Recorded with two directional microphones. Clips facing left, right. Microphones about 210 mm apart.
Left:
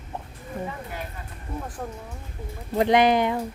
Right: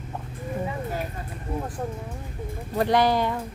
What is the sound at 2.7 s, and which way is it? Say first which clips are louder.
Speech: left 2 dB; 20° left (ahead or behind).